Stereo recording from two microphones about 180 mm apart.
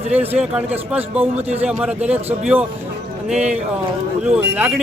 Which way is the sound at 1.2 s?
35° right (ahead or behind).